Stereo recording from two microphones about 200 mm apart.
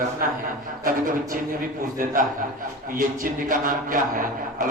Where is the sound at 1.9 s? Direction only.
45° right (ahead or behind).